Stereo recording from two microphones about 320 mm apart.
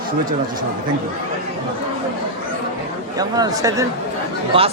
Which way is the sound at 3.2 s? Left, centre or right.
Centre.